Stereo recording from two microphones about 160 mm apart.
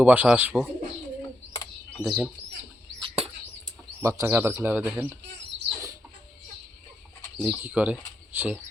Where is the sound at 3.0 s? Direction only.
35° right (ahead or behind).